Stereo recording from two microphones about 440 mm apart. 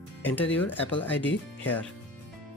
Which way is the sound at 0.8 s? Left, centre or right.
Centre.